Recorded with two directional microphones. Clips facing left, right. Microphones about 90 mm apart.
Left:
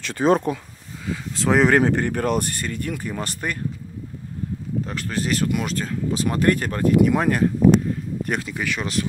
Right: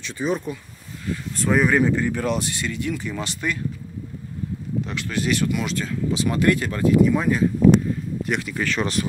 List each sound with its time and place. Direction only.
0.0 s speech: 80° left; by 3.6 s 50° left (ahead or behind)
4.8 s speech: 40° left (ahead or behind)
7.0 s speech: 65° left (ahead or behind)
8.2 s speech: 40° left (ahead or behind)
8.5 s speech: 5° left (ahead or behind)